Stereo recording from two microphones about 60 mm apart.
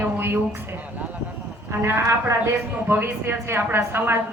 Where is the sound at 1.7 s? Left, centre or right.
Right.